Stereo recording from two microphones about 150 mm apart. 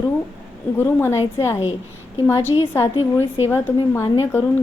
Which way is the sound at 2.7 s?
15° left (ahead or behind).